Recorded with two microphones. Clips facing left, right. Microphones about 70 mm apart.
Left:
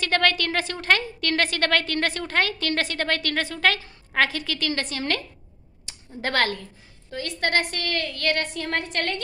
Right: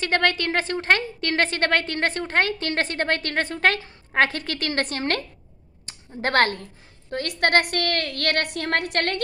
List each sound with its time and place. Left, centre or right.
0.0 s a woman's voice: right